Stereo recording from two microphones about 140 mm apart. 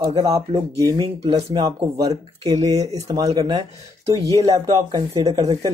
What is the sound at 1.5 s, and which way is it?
Speech, 30° right (ahead or behind).